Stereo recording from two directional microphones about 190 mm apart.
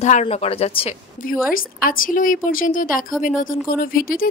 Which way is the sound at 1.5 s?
45° left (ahead or behind).